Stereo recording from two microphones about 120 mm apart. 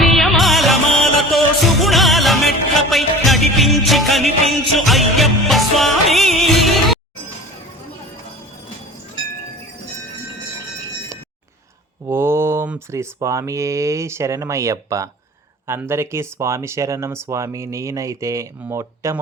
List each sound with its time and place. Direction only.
0.0 s music: centre (ahead or behind)
12.0 s mantra: 20° right (ahead or behind)
12.9 s speech: 25° right (ahead or behind)